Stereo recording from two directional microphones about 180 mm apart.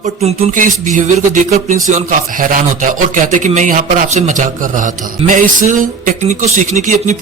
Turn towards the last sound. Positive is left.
turn(degrees=-45)  # may be behind; listen again after turning